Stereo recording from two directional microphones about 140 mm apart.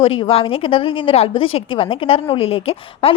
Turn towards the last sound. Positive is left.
turn(degrees=45)  # may be behind; listen again after turning